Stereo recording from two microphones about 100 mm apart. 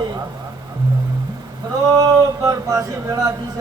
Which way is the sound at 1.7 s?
35° right (ahead or behind).